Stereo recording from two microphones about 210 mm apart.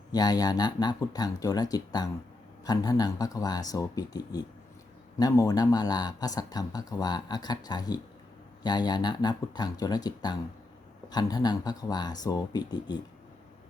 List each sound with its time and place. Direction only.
0.1 s speech: 20° left (ahead or behind)